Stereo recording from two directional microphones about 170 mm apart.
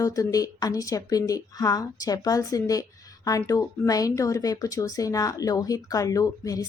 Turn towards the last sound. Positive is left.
turn(degrees=20)  # may be behind; listen again after turning